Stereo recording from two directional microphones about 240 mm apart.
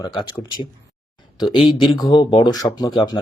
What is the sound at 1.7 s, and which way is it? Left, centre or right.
Speech, centre.